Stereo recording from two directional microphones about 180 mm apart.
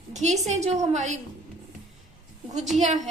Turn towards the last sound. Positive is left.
turn(degrees=-40)  # may be behind; listen again after turning